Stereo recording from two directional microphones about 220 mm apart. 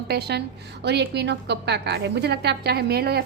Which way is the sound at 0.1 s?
50° right (ahead or behind).